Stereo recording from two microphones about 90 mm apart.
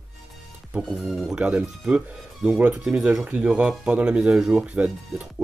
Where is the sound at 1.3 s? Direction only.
15° right (ahead or behind).